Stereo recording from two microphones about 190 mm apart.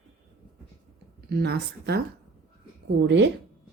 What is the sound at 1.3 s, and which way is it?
Speech, 60° right (ahead or behind).